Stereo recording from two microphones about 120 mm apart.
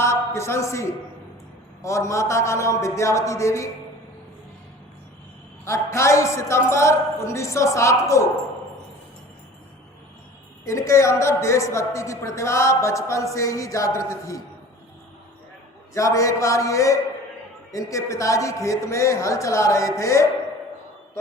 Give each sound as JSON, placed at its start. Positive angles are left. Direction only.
{"t": 0.0, "sound": "a sound", "side_deg": 25}
{"t": 1.8, "sound": "a man's voice", "side_deg": 25}
{"t": 5.6, "sound": "a man's voice", "side_deg": 25}
{"t": 10.7, "sound": "a man's voice", "side_deg": 25}
{"t": 16.0, "sound": "a man's voice", "side_deg": 25}